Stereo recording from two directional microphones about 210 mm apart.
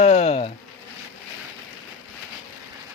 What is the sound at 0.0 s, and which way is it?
Bee, 30° left (ahead or behind).